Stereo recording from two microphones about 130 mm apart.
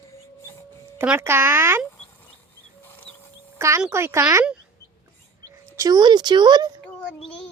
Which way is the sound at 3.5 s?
20° right (ahead or behind).